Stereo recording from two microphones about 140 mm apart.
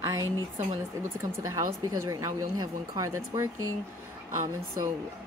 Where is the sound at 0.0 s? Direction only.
20° right (ahead or behind).